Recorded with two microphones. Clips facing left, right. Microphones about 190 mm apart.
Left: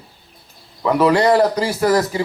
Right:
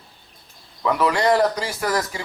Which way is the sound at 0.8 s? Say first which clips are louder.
Left 5 dB; 30° left (ahead or behind).